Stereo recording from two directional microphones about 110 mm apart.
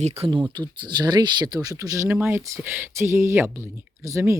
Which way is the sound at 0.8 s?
40° right (ahead or behind).